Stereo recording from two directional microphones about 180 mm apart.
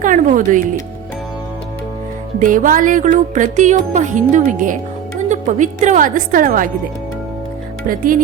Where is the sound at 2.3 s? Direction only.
45° right (ahead or behind).